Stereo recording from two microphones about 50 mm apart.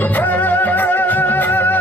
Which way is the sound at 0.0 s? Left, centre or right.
Left.